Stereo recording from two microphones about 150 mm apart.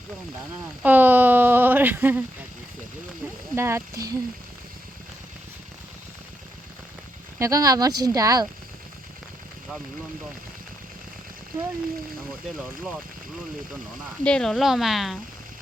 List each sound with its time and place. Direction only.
0.8 s speech: 10° right (ahead or behind)
3.5 s speech: 15° right (ahead or behind)
7.3 s speech: 20° right (ahead or behind)
14.3 s speech: 5° left (ahead or behind)